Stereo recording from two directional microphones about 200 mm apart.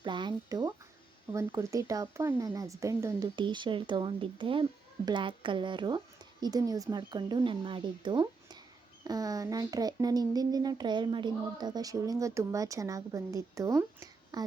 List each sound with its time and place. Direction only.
0.0 s speech: 20° right (ahead or behind)